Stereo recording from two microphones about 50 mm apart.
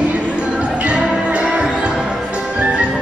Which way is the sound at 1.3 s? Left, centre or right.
Right.